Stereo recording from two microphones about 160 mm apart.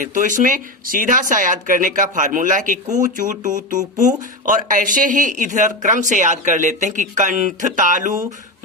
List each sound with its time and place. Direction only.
0.0 s speech: 55° right (ahead or behind)